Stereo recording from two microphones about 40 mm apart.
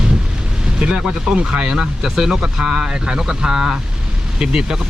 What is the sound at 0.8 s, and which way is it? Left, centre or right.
Speech, right.